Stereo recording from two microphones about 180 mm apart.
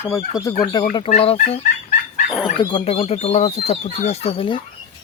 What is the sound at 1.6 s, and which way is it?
Chicken, 50° left (ahead or behind).